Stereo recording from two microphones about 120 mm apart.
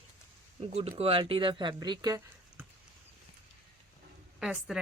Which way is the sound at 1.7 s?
30° right (ahead or behind).